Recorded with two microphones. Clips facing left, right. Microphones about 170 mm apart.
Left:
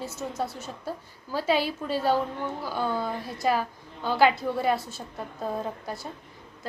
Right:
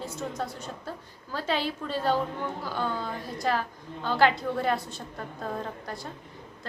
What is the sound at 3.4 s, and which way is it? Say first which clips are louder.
A woman's voice: left 3 dB; 10° left (ahead or behind).